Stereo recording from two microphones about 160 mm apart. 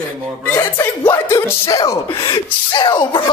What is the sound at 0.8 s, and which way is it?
Speech, 15° left (ahead or behind).